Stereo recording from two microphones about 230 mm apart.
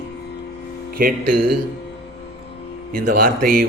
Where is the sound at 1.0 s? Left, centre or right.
Right.